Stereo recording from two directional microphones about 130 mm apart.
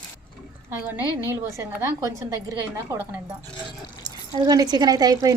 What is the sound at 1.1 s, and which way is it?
Speech, 25° left (ahead or behind).